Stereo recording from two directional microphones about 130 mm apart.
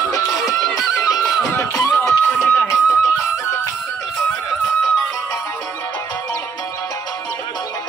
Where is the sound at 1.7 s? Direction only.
20° left (ahead or behind).